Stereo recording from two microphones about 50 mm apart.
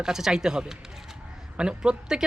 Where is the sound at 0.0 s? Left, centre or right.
Centre.